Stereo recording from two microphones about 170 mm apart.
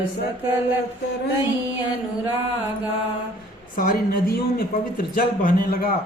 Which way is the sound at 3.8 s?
60° left (ahead or behind).